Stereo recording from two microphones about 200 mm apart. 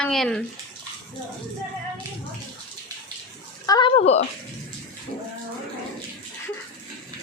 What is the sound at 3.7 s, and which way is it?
Speech, 25° left (ahead or behind).